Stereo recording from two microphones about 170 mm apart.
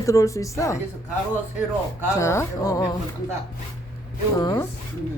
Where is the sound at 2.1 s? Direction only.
15° left (ahead or behind).